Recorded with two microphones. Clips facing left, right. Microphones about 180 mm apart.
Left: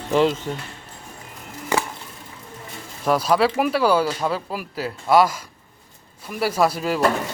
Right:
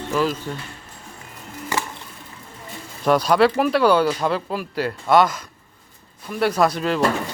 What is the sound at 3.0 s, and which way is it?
Speech, centre (ahead or behind).